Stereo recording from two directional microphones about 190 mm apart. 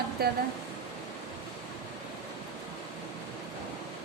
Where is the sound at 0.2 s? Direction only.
55° right (ahead or behind).